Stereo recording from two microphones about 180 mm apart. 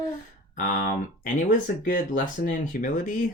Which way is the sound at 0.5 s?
45° left (ahead or behind).